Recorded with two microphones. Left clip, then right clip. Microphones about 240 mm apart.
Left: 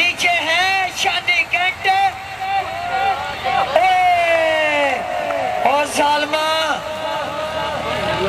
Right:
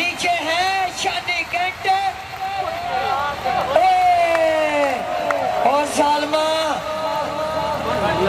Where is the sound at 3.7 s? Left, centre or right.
Centre.